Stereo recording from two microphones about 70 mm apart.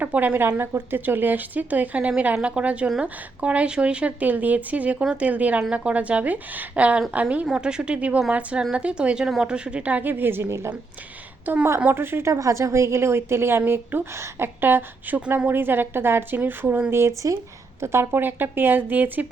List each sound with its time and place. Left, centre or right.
0.0 s speech: right
11.5 s a woman's voice: right
12.3 s a woman's voice: right